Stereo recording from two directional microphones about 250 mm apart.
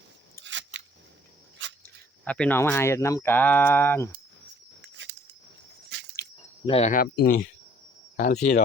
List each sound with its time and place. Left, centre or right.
0.4 s scissors: right
1.8 s speech: centre
4.8 s a sound: right
6.7 s speech: left